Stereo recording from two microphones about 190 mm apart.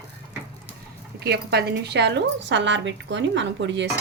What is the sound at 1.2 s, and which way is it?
A woman's voice, 60° right (ahead or behind).